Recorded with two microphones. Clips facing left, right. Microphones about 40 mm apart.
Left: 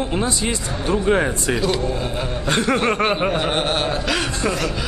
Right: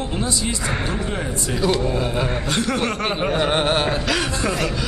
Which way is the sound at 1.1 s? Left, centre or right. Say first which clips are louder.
Left 7 dB; left.